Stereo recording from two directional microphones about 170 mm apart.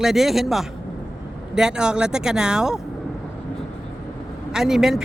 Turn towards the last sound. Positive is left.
turn(degrees=0)  # may be behind; listen again after turning